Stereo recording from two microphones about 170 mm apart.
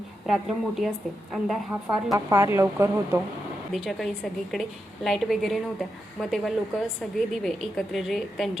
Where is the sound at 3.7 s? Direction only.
Centre (ahead or behind).